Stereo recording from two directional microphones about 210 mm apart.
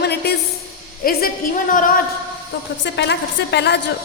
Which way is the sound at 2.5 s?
50° left (ahead or behind).